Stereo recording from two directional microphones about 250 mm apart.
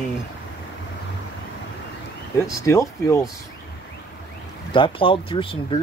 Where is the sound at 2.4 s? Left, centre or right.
Centre.